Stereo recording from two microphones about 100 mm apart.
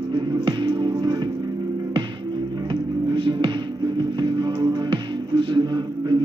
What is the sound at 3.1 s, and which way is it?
Music, 55° right (ahead or behind).